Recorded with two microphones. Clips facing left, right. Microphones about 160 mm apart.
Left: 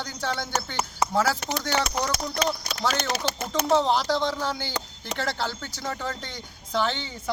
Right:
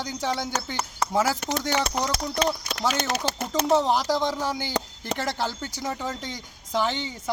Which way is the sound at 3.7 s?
15° right (ahead or behind).